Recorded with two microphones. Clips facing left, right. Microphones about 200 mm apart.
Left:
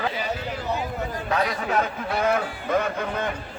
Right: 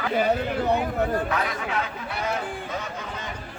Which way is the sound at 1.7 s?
50° left (ahead or behind).